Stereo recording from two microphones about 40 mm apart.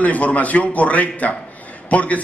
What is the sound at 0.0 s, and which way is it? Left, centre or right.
A man's voice, left.